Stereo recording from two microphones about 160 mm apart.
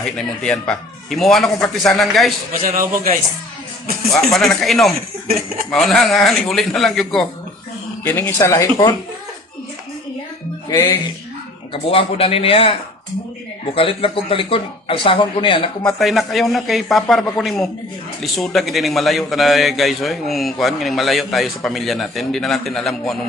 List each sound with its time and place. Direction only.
0.4 s a man's voice: 5° left (ahead or behind)
2.6 s a man's voice: 60° right (ahead or behind)
4.1 s a man's voice: centre (ahead or behind)
8.0 s speech: 10° left (ahead or behind)
10.7 s speech: 15° left (ahead or behind)
11.7 s speech: 35° left (ahead or behind)
13.7 s speech: 35° left (ahead or behind)
15.8 s a man's voice: centre (ahead or behind)